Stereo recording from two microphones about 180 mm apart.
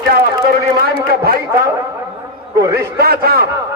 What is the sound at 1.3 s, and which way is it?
Speech, 60° right (ahead or behind).